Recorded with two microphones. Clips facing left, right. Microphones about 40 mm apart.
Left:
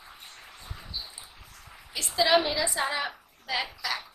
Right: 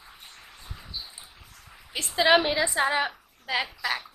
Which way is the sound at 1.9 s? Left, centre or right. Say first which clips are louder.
Right 2 dB; right.